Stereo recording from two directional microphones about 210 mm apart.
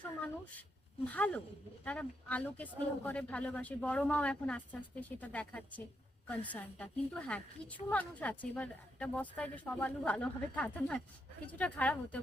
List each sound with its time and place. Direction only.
1.0 s speech: 5° left (ahead or behind)